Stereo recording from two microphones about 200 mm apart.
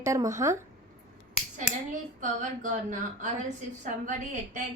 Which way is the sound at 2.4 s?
40° right (ahead or behind).